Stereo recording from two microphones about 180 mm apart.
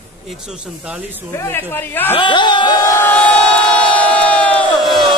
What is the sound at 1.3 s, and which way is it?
Speech, 15° left (ahead or behind).